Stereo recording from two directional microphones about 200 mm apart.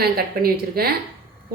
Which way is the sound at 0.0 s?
50° right (ahead or behind).